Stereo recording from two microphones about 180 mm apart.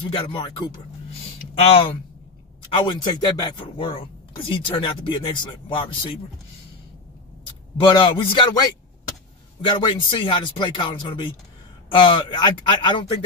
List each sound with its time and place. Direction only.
0.3 s speech: 30° left (ahead or behind)
7.8 s speech: 30° left (ahead or behind)